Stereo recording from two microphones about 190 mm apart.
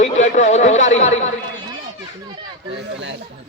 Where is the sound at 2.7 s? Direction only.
70° right (ahead or behind).